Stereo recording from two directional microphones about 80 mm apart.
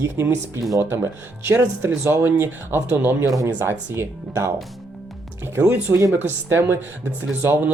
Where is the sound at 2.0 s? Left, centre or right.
Right.